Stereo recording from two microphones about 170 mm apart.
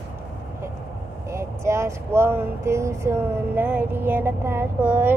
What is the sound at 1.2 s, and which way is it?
Speech, 15° right (ahead or behind).